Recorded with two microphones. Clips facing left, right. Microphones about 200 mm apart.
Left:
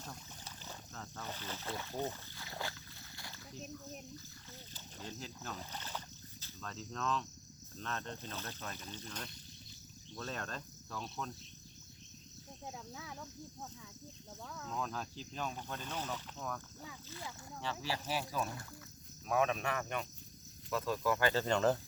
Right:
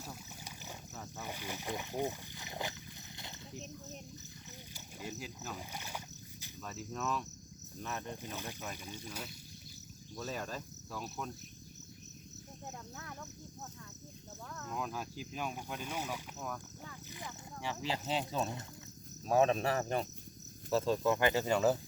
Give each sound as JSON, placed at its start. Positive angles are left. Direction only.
{"t": 0.0, "sound": "boat", "side_deg": -10}
{"t": 3.2, "sound": "a sound", "side_deg": -20}
{"t": 3.6, "sound": "speech", "side_deg": 10}
{"t": 4.7, "sound": "speech", "side_deg": -10}
{"t": 6.4, "sound": "cricket", "side_deg": -10}
{"t": 7.8, "sound": "speech", "side_deg": -10}
{"t": 12.6, "sound": "speech", "side_deg": 10}
{"t": 14.7, "sound": "speech", "side_deg": -10}
{"t": 17.6, "sound": "speech", "side_deg": -15}